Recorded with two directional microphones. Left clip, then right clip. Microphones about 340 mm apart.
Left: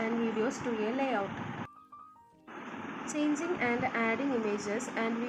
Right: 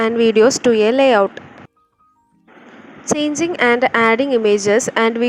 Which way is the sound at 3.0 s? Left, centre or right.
Right.